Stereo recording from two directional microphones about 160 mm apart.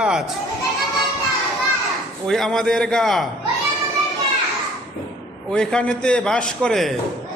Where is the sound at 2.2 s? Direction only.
Centre (ahead or behind).